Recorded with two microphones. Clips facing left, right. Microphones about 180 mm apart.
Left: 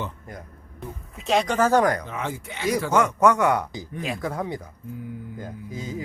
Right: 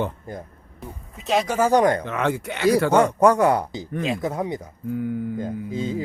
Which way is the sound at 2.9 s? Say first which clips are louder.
Right 3 dB; 30° right (ahead or behind).